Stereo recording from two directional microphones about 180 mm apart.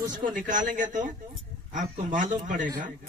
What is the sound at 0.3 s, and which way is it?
Speech, 45° right (ahead or behind).